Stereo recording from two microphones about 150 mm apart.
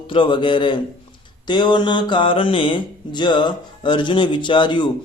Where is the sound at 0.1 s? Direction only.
35° left (ahead or behind).